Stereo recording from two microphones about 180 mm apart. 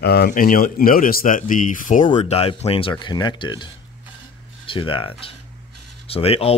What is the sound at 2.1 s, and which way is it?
Speech, 35° left (ahead or behind).